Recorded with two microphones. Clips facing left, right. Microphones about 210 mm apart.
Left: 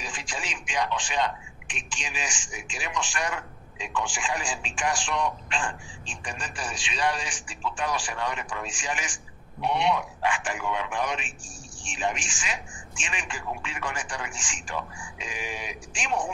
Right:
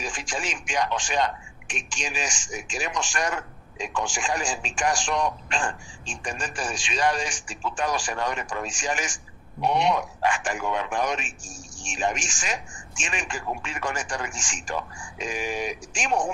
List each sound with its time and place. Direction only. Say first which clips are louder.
0.0 s speech: right 5 dB; 45° right (ahead or behind)